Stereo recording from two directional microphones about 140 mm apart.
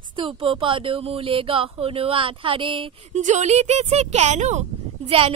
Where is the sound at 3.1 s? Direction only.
60° right (ahead or behind).